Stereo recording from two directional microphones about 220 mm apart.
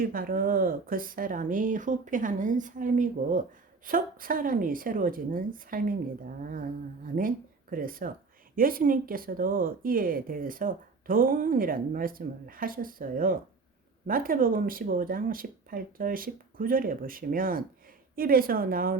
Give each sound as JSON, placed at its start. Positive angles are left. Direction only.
{"t": 0.0, "sound": "speech", "side_deg": -40}